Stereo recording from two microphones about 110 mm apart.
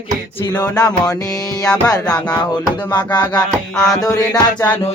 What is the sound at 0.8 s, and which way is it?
Music, 35° left (ahead or behind).